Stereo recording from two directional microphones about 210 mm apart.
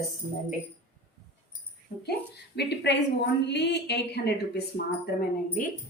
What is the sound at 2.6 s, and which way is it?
A woman's voice, 55° left (ahead or behind).